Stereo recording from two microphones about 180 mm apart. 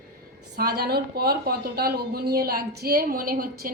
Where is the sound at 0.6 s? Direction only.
60° right (ahead or behind).